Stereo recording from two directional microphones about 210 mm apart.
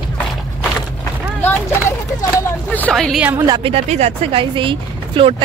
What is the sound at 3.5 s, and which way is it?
Speech, 25° right (ahead or behind).